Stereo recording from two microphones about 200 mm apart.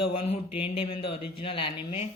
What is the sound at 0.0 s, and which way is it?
Speech, 25° left (ahead or behind).